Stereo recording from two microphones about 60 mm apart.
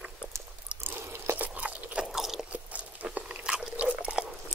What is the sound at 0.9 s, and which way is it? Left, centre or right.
Chewing, right.